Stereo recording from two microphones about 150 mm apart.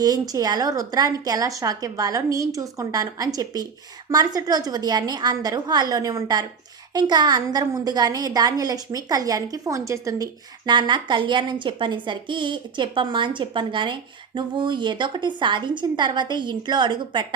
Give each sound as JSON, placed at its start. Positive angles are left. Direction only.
{"t": 0.0, "sound": "a woman's voice", "side_deg": -25}